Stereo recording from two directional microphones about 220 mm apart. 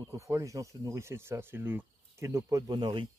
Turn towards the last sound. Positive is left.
turn(degrees=-20)  # may be behind; listen again after turning